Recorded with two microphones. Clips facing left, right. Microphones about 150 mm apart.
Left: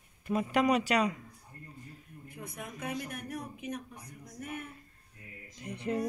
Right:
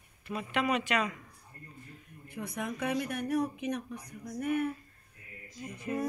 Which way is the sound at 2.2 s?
80° right.